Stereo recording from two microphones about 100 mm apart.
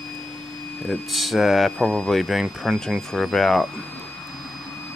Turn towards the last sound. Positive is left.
turn(degrees=5)  # may be behind; listen again after turning